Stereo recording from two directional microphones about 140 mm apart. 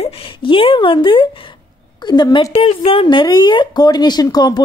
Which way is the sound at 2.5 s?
40° left (ahead or behind).